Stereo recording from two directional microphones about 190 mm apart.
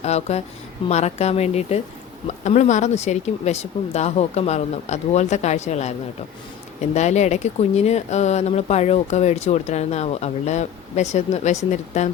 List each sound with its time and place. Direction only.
0.0 s speech: 35° left (ahead or behind)
6.9 s speech: 35° left (ahead or behind)